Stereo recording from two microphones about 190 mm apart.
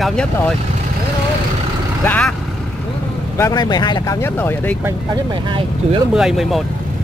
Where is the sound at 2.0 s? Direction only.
10° left (ahead or behind).